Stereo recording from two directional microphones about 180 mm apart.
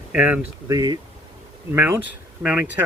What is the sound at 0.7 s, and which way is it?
Speech, 20° right (ahead or behind).